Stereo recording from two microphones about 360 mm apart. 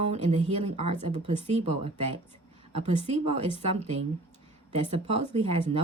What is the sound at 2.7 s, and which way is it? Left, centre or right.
Speech, centre.